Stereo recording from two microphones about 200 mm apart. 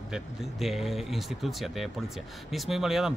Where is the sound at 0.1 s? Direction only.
Centre (ahead or behind).